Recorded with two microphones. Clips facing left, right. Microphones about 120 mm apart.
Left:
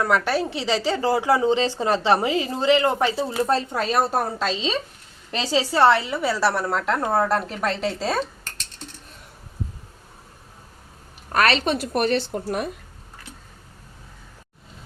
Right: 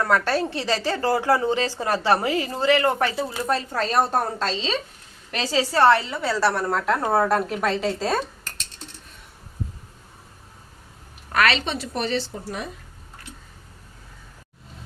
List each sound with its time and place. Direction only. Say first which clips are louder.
0.0 s a woman's voice: even; 15° left (ahead or behind)
3.8 s a woman's voice: even; 5° left (ahead or behind)
5.4 s a woman's voice: left 1 dB; 15° left (ahead or behind); by 8.2 s centre (ahead or behind)
11.3 s a woman's voice: left 2 dB; 40° left (ahead or behind); by 12.6 s 55° left (ahead or behind)